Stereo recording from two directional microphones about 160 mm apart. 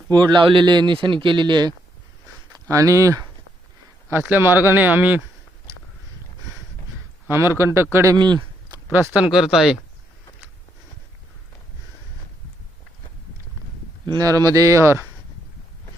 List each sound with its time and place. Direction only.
0.1 s a man's voice: 30° right (ahead or behind); by 5.2 s 10° right (ahead or behind)
7.3 s a man's voice: 15° right (ahead or behind)
8.9 s speech: 10° right (ahead or behind)
14.0 s a man's voice: 25° right (ahead or behind)